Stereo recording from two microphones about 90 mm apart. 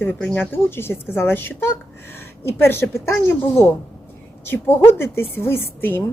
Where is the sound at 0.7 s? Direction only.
25° left (ahead or behind).